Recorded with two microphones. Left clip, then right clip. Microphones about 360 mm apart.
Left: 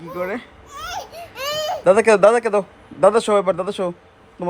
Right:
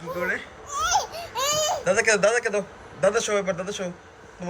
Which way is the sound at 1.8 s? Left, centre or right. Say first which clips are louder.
Left 10 dB; centre.